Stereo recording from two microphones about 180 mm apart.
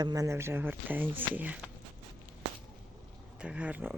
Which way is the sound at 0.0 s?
20° right (ahead or behind).